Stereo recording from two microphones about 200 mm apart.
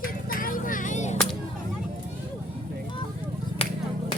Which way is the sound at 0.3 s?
45° left (ahead or behind).